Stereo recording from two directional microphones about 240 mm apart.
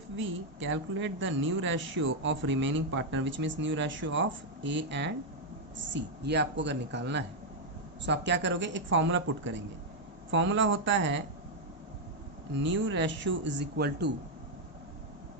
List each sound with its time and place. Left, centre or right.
0.2 s a woman's voice: right
12.5 s a woman's voice: right